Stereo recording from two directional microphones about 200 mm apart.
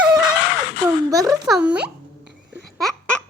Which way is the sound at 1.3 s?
Centre (ahead or behind).